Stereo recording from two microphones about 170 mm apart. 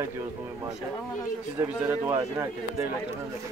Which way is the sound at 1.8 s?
15° right (ahead or behind).